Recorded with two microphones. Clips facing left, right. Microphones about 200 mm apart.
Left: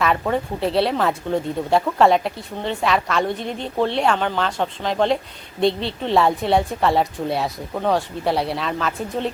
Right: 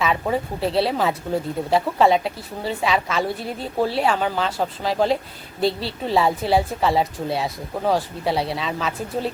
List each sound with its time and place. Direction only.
0.0 s speech: centre (ahead or behind)